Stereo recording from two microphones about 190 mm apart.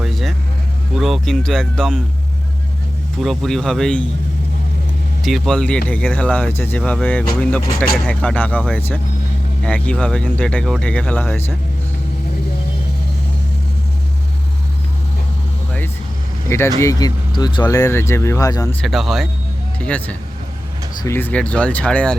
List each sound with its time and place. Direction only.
0.0 s vehicle: centre (ahead or behind)
0.9 s speech: centre (ahead or behind)
3.2 s speech: centre (ahead or behind)
5.2 s speech: centre (ahead or behind)
16.5 s speech: 15° left (ahead or behind)
18.8 s speech: centre (ahead or behind)